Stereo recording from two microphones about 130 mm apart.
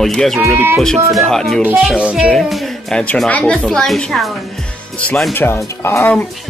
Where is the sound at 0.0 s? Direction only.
Centre (ahead or behind).